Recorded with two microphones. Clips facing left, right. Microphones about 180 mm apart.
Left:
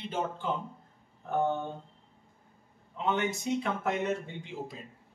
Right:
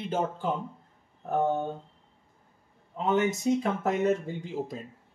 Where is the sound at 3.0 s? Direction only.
40° right (ahead or behind).